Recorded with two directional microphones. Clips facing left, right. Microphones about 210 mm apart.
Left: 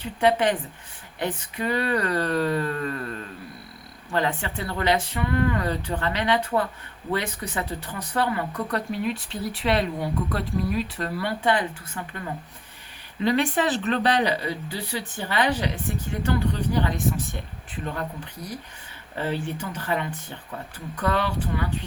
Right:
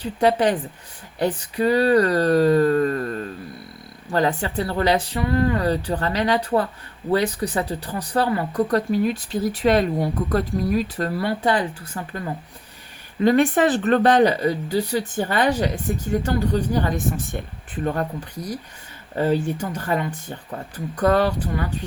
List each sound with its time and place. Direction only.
0.0 s speech: 40° right (ahead or behind)
13.2 s speech: 50° right (ahead or behind)
19.1 s speech: 45° right (ahead or behind)